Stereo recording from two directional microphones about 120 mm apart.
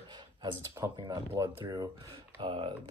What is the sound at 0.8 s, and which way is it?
Speech, 25° right (ahead or behind).